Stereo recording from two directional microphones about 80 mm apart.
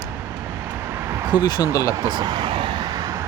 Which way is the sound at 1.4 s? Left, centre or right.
Left.